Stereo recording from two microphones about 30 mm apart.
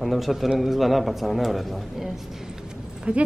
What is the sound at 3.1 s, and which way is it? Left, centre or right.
Speech, right.